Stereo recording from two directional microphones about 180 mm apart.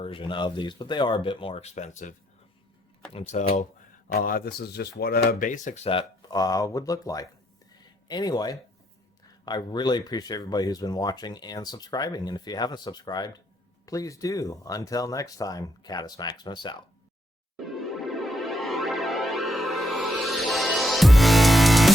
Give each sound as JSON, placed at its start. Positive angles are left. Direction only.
{"t": 0.0, "sound": "speech", "side_deg": 30}
{"t": 4.1, "sound": "speech", "side_deg": 50}
{"t": 17.6, "sound": "music", "side_deg": 0}